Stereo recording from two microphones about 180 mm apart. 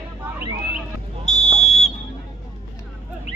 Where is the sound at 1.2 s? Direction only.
35° left (ahead or behind).